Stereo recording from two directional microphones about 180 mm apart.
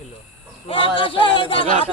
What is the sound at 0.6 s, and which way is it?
Speech, 30° left (ahead or behind).